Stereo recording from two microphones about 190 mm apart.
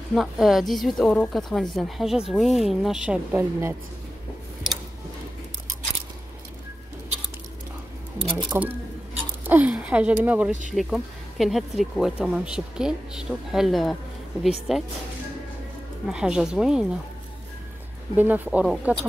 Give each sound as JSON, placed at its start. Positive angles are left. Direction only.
{"t": 0.1, "sound": "a woman's voice", "side_deg": 0}
{"t": 8.2, "sound": "speech", "side_deg": -25}
{"t": 9.5, "sound": "a woman's voice", "side_deg": -10}
{"t": 16.1, "sound": "a woman's voice", "side_deg": -5}
{"t": 18.1, "sound": "speech", "side_deg": -10}